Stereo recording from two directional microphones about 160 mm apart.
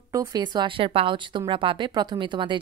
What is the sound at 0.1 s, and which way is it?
A woman's voice, 20° right (ahead or behind).